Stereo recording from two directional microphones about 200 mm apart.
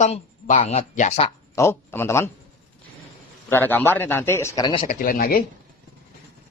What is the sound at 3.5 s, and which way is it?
Speech, 10° left (ahead or behind).